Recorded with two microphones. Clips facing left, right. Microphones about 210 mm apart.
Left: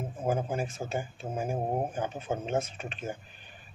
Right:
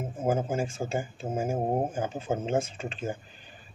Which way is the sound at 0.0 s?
25° right (ahead or behind).